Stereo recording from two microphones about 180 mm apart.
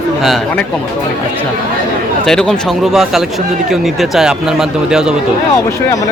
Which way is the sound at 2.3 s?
5° left (ahead or behind).